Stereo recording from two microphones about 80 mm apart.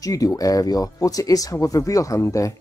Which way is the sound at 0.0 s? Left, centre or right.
Left.